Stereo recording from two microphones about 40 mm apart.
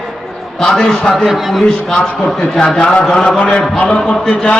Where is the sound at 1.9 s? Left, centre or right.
Left.